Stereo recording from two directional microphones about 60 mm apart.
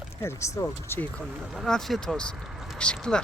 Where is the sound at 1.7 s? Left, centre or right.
Centre.